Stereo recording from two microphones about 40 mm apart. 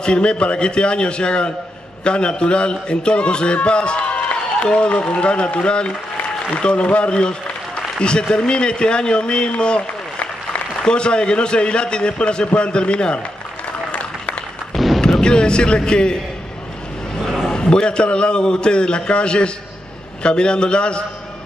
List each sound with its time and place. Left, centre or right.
0.0 s a man's voice: left
15.0 s speech: centre
17.2 s a sound: centre
17.5 s a man's voice: left